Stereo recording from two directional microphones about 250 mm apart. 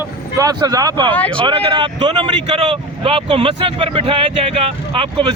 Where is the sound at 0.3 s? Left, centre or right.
Centre.